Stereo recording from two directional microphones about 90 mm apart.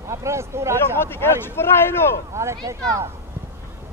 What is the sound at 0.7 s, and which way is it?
Speech, 25° left (ahead or behind).